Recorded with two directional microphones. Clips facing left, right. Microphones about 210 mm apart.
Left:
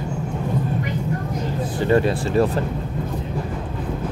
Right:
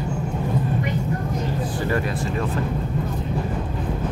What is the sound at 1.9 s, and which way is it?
Speech, 30° left (ahead or behind).